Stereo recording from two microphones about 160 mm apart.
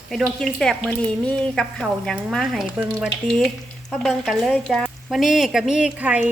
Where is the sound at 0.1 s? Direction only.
Centre (ahead or behind).